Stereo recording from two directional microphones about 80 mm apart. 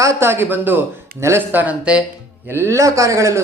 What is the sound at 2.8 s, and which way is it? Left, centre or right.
Speech, right.